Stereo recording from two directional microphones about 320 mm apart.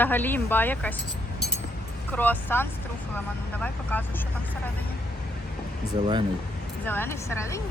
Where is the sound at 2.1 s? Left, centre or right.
Centre.